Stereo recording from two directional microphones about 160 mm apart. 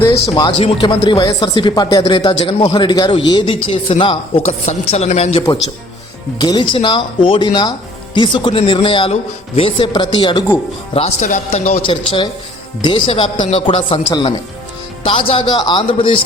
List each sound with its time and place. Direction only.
0.1 s speech: 25° left (ahead or behind); by 5.4 s 40° left (ahead or behind)
6.4 s speech: 30° left (ahead or behind)
13.3 s speech: 45° left (ahead or behind)